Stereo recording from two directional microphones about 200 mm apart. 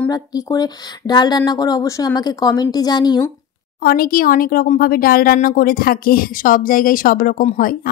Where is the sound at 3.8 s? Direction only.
45° left (ahead or behind).